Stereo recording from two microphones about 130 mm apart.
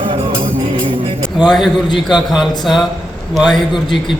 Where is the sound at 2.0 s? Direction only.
Centre (ahead or behind).